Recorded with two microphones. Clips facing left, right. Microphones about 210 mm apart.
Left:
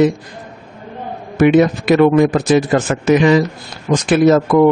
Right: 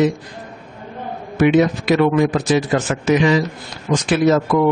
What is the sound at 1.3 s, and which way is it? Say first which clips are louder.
A man's voice: left 3 dB; 50° left (ahead or behind).